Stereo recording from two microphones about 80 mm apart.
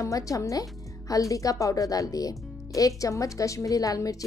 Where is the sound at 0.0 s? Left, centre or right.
Left.